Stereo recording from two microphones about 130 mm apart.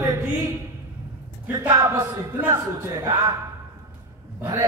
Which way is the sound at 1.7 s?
25° right (ahead or behind).